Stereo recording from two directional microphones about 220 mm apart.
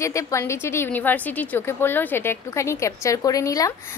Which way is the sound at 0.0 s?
15° left (ahead or behind).